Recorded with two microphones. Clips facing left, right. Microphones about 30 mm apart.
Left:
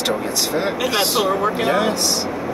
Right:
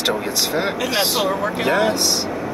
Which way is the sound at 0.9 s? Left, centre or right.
Centre.